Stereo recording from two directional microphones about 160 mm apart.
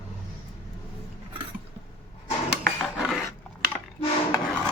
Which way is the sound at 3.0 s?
Centre (ahead or behind).